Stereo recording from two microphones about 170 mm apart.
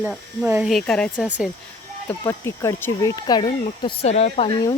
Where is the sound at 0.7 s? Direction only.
5° left (ahead or behind).